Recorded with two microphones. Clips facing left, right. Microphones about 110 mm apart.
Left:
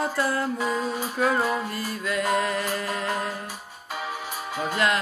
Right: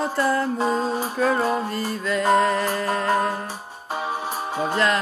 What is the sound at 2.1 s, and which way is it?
Music, 5° left (ahead or behind).